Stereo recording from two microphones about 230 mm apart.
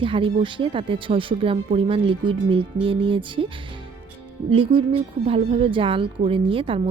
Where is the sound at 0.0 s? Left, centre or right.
Right.